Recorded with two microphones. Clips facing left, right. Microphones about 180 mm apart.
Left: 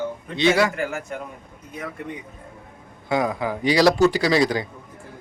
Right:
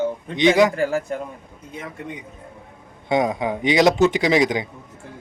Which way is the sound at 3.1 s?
20° right (ahead or behind).